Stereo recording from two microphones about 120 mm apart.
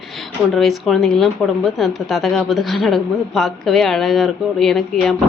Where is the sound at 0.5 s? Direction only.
Centre (ahead or behind).